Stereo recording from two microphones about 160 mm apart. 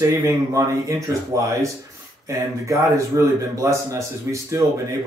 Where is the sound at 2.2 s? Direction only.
20° right (ahead or behind).